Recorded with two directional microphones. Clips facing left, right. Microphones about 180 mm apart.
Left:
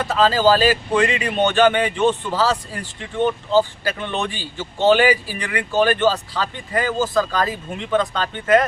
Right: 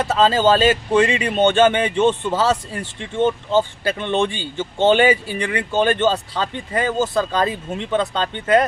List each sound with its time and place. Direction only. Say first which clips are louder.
0.0 s speech: right 1 dB; 25° right (ahead or behind)